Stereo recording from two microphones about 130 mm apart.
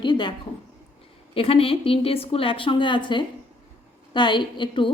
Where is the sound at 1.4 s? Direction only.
45° left (ahead or behind).